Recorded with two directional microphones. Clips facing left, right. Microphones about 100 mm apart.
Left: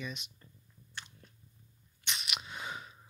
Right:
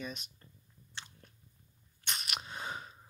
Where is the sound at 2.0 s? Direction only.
45° right (ahead or behind).